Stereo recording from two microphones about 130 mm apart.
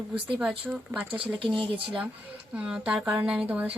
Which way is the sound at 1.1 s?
40° right (ahead or behind).